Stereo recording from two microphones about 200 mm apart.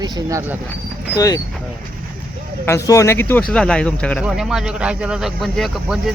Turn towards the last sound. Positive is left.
turn(degrees=0)  # may be behind; listen again after turning